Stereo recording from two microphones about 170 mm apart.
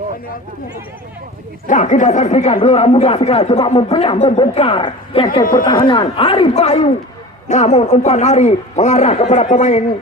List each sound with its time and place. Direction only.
1.6 s a man's voice: 45° left (ahead or behind)